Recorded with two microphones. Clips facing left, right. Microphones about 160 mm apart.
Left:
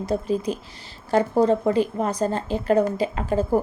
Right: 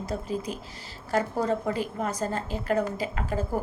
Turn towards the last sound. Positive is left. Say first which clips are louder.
# left 7 dB
turn(degrees=25)  # may be behind; listen again after turning